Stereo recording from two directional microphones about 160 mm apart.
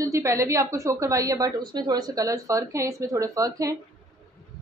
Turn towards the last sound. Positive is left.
turn(degrees=-20)  # may be behind; listen again after turning